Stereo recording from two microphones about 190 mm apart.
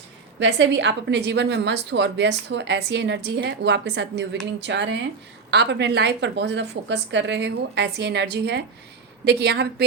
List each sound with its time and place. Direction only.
0.3 s a woman's voice: 70° right (ahead or behind)